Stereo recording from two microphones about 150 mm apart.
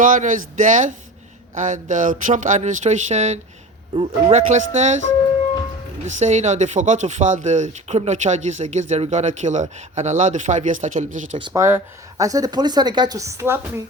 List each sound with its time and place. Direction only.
0.0 s speech: 60° right (ahead or behind)
6.1 s speech: 50° right (ahead or behind)
11.5 s speech: 20° right (ahead or behind)